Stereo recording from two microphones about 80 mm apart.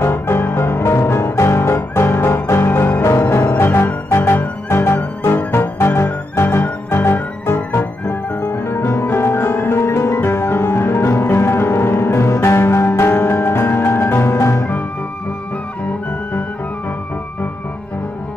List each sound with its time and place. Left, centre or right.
0.0 s music: left